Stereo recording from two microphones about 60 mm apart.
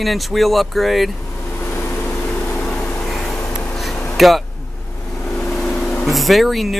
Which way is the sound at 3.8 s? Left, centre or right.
Centre.